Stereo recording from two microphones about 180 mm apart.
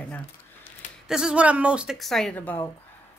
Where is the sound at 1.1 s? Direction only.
5° right (ahead or behind).